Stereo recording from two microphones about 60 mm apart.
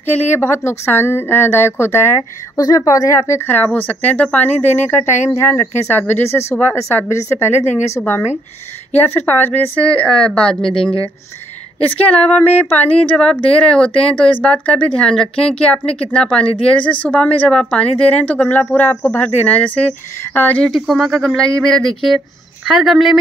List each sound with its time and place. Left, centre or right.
0.0 s speech: left
2.5 s speech: left
3.3 s speech: left
3.5 s a woman's voice: left
4.6 s speech: left
9.8 s a woman's voice: centre
12.0 s a woman's voice: left
20.8 s a woman's voice: centre
22.7 s speech: centre